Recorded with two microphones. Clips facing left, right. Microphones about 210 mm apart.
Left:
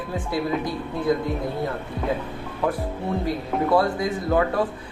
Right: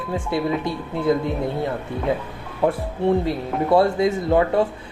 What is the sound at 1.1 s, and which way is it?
Speech, 25° right (ahead or behind).